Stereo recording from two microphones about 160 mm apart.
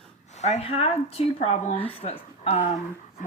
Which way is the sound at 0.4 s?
40° left (ahead or behind).